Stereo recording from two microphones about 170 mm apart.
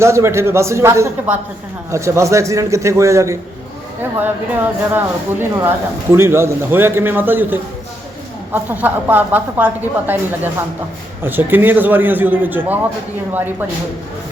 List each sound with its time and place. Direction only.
0.0 s a woman's voice: 15° right (ahead or behind)